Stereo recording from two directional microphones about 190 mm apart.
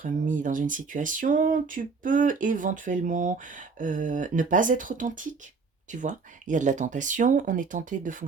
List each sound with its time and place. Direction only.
0.0 s speech: 45° right (ahead or behind)